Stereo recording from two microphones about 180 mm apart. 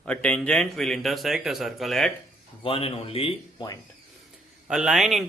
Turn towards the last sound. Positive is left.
turn(degrees=0)  # may be behind; listen again after turning